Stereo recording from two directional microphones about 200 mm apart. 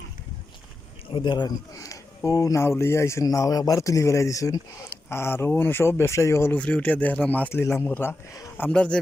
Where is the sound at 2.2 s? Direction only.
15° left (ahead or behind).